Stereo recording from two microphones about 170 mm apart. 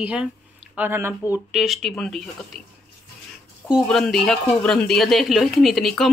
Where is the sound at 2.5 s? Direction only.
60° left (ahead or behind).